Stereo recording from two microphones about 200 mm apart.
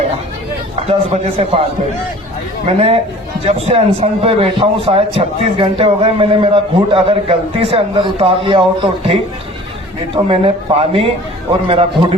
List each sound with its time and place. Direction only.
0.9 s a man's voice: 30° right (ahead or behind)
2.6 s a man's voice: 30° right (ahead or behind)
10.2 s a man's voice: 30° right (ahead or behind)